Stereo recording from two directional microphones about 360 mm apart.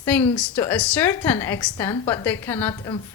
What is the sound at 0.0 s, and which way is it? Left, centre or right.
A woman's voice, centre.